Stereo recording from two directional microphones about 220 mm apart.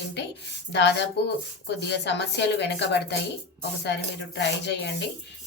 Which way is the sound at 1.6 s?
50° left (ahead or behind).